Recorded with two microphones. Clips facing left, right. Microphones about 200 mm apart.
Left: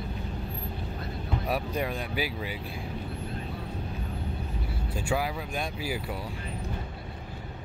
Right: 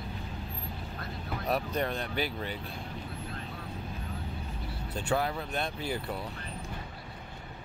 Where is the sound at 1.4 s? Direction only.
10° left (ahead or behind).